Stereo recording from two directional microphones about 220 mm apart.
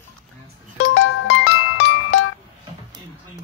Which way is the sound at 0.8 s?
65° left (ahead or behind).